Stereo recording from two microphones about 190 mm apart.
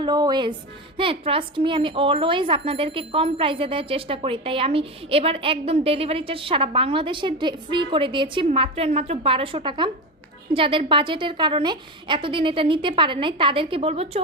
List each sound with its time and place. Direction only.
0.0 s speech: 20° right (ahead or behind)